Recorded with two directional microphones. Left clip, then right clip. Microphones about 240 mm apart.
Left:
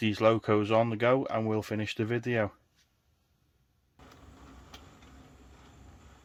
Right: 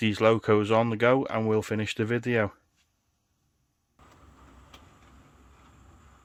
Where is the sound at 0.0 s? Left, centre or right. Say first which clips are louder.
Right 3 dB; right.